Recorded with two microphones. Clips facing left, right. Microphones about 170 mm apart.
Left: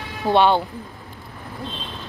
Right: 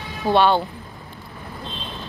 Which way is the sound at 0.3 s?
20° left (ahead or behind).